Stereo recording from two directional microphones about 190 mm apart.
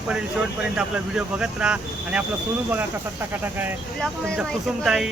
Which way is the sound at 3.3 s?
10° right (ahead or behind).